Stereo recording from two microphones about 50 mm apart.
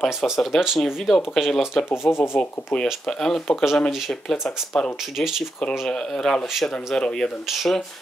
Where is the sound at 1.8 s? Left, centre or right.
Centre.